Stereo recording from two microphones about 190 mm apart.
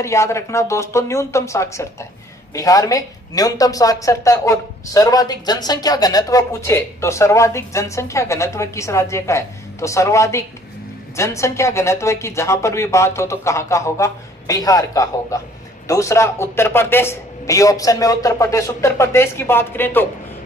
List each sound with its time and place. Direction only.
0.0 s speech: 15° left (ahead or behind)